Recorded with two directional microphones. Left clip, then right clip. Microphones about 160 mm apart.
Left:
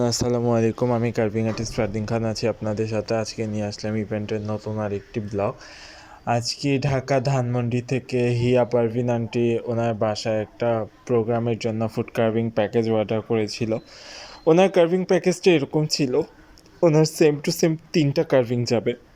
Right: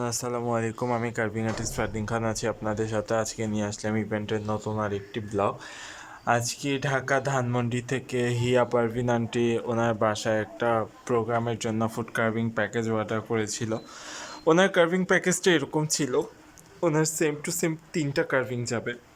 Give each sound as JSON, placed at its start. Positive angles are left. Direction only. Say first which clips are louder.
{"t": 0.0, "sound": "speech", "louder": "left 7 dB", "side_deg": 20}